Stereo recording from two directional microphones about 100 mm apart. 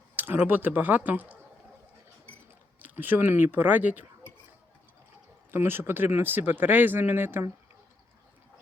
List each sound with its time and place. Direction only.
0.2 s speech: 20° right (ahead or behind)
2.8 s speech: 20° right (ahead or behind)
5.5 s speech: 20° right (ahead or behind)